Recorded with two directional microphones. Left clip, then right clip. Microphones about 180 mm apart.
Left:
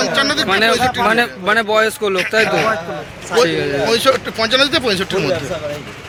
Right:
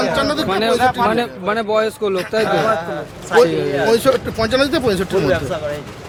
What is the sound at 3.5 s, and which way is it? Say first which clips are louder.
Speech: left 1 dB; 10° right (ahead or behind).